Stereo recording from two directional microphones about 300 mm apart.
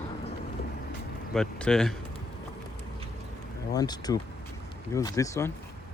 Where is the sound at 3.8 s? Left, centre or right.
Centre.